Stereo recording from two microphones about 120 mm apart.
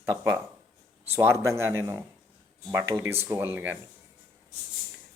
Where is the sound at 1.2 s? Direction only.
20° right (ahead or behind).